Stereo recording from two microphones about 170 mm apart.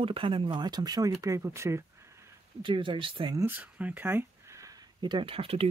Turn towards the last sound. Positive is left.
turn(degrees=-35)  # may be behind; listen again after turning